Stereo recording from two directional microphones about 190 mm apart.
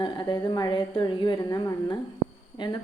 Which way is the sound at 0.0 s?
25° left (ahead or behind).